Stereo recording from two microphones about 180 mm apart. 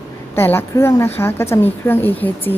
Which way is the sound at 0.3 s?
15° left (ahead or behind).